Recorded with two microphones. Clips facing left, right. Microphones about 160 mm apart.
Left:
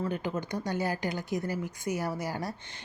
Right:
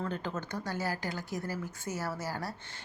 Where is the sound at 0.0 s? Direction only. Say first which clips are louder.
Left 4 dB; 15° left (ahead or behind).